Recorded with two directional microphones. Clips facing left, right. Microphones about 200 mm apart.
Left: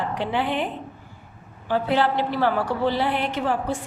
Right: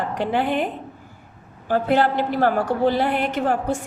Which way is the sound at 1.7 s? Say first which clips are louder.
Right 3 dB; 45° right (ahead or behind).